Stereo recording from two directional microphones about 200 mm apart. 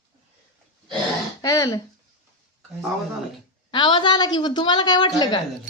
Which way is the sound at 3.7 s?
25° left (ahead or behind).